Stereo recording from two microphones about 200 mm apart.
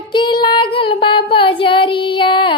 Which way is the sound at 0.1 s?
25° left (ahead or behind).